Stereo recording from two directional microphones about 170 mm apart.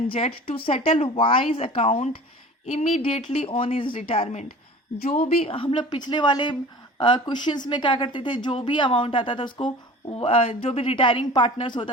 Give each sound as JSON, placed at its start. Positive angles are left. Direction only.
{"t": 0.1, "sound": "a woman's voice", "side_deg": 35}